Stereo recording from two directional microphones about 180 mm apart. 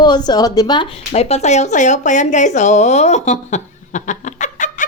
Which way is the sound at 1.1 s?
35° left (ahead or behind).